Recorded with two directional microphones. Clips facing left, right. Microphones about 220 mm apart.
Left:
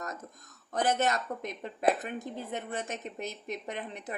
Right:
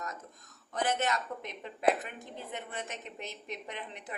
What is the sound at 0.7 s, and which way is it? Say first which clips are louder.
Speech: left 3 dB; 45° left (ahead or behind).